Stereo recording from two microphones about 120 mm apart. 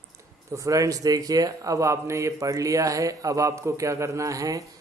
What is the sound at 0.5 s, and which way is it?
A man's voice, 25° right (ahead or behind).